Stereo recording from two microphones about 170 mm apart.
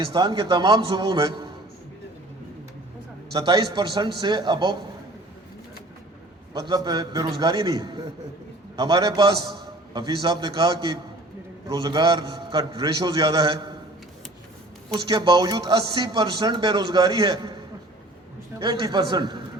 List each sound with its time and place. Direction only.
0.0 s speech: 25° right (ahead or behind)
3.3 s speech: 25° right (ahead or behind)
6.5 s speech: 25° right (ahead or behind)
15.0 s speech: 25° right (ahead or behind)
18.6 s speech: 30° right (ahead or behind)